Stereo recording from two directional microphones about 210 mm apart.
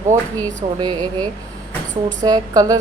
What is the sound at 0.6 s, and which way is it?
Speech, 25° right (ahead or behind).